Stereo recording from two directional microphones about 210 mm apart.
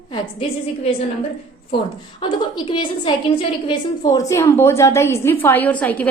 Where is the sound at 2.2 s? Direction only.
20° left (ahead or behind).